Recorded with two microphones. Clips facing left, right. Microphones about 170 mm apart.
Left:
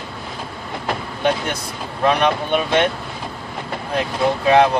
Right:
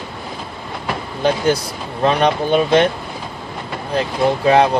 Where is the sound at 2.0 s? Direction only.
35° right (ahead or behind).